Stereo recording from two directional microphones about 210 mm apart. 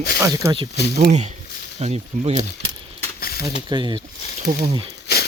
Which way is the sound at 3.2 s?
45° left (ahead or behind).